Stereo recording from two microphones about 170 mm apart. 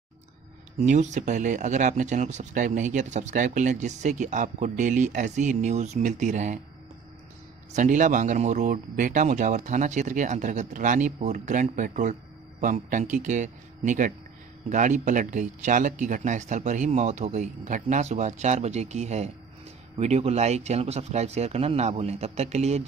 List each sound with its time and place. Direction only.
0.7 s speech: 45° right (ahead or behind)
7.7 s speech: 50° right (ahead or behind)